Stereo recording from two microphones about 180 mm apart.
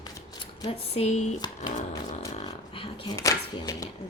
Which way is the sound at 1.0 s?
40° left (ahead or behind).